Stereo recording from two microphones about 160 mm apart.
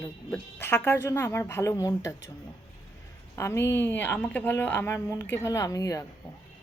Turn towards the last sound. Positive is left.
turn(degrees=20)  # may be behind; listen again after turning